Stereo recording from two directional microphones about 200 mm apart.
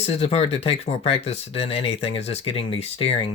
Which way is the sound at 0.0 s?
30° left (ahead or behind).